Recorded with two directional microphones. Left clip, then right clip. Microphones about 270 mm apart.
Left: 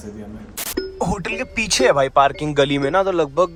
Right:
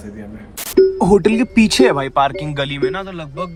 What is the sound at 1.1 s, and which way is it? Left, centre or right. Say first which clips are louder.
Speech: right 9 dB; centre.